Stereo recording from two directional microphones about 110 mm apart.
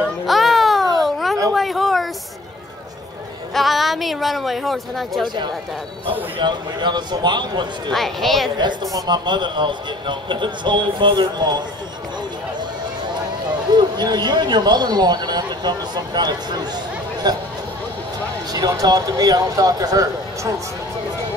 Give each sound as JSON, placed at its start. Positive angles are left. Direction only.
{"t": 0.3, "sound": "a sound", "side_deg": 0}
{"t": 3.5, "sound": "speech", "side_deg": 0}
{"t": 5.2, "sound": "a man's voice", "side_deg": -40}
{"t": 7.9, "sound": "speech", "side_deg": 0}
{"t": 8.5, "sound": "a man's voice", "side_deg": -40}
{"t": 13.7, "sound": "speech", "side_deg": -40}
{"t": 18.5, "sound": "speech", "side_deg": -35}